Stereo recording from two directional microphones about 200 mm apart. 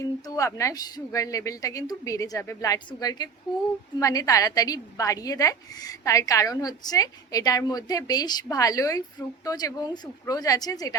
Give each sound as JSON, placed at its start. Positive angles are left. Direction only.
{"t": 0.0, "sound": "a woman's voice", "side_deg": 15}